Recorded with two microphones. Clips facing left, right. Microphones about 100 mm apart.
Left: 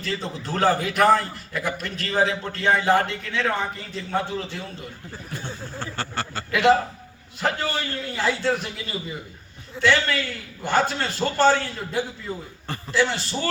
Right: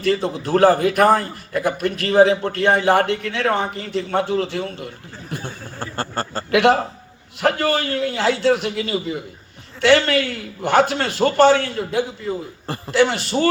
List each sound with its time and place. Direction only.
0.0 s a man's voice: 60° right (ahead or behind)
5.8 s speech: 45° right (ahead or behind)
6.5 s a man's voice: 60° right (ahead or behind)